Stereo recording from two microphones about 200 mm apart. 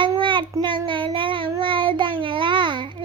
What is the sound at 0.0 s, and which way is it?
Child singing, 25° right (ahead or behind).